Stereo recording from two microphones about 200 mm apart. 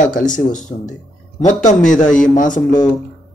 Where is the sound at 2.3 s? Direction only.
40° left (ahead or behind).